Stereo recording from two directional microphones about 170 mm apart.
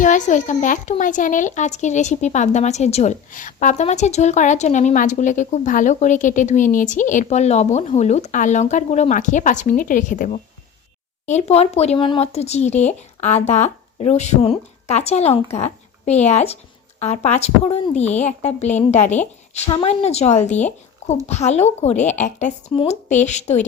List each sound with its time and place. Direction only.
0.0 s a child's voice: 50° left (ahead or behind)
22.7 s speech: 30° left (ahead or behind)
23.0 s a child's voice: 45° left (ahead or behind)